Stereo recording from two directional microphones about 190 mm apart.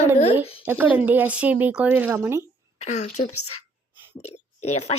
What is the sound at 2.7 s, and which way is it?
A woman's voice, 35° left (ahead or behind).